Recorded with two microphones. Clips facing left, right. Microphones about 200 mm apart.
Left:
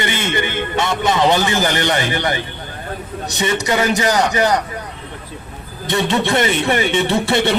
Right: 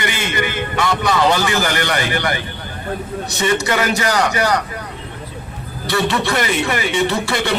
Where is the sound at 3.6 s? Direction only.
20° left (ahead or behind).